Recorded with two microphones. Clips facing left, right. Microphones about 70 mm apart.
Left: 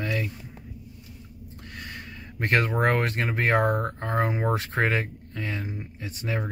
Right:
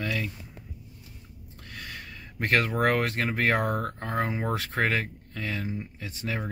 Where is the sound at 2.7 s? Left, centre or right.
Left.